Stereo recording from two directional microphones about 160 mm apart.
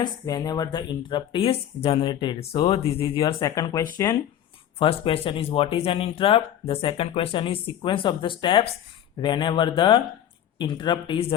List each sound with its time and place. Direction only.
0.0 s speech: 25° left (ahead or behind)
3.2 s speech: 25° left (ahead or behind)
4.8 s speech: 35° left (ahead or behind)